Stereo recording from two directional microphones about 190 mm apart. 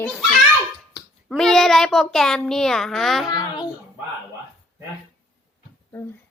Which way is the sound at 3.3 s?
20° left (ahead or behind).